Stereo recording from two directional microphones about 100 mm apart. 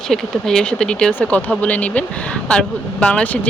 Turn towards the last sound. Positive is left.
turn(degrees=15)  # may be behind; listen again after turning